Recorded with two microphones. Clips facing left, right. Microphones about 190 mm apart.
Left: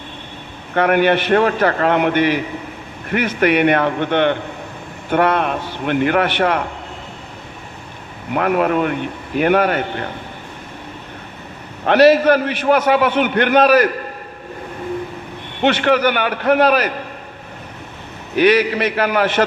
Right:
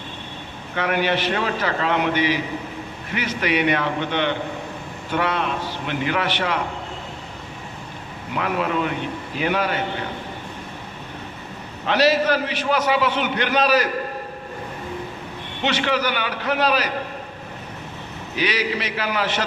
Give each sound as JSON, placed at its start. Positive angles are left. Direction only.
{"t": 0.7, "sound": "a man's voice", "side_deg": 55}
{"t": 8.3, "sound": "a man's voice", "side_deg": 55}
{"t": 11.9, "sound": "a man's voice", "side_deg": 55}
{"t": 15.6, "sound": "a man's voice", "side_deg": 55}
{"t": 18.3, "sound": "a man's voice", "side_deg": 55}